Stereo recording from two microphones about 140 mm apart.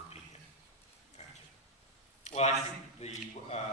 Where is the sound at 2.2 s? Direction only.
50° left (ahead or behind).